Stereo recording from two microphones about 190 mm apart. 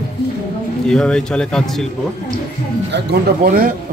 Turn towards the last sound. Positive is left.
turn(degrees=-55)  # may be behind; listen again after turning